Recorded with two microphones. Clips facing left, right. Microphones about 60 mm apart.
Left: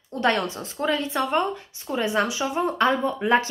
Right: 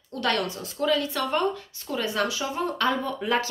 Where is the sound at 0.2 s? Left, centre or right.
Left.